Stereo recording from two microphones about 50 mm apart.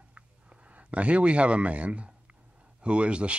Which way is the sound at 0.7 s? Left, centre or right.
Right.